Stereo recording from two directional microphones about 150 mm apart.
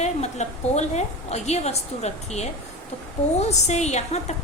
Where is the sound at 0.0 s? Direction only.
50° left (ahead or behind).